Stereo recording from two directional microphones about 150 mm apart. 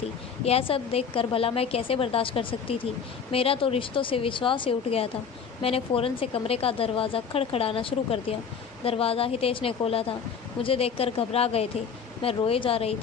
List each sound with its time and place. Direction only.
0.5 s a woman's voice: 40° left (ahead or behind)